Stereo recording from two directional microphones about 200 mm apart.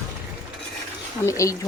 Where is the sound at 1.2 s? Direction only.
15° left (ahead or behind).